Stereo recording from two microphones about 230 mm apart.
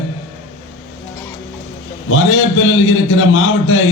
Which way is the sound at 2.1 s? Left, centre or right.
Left.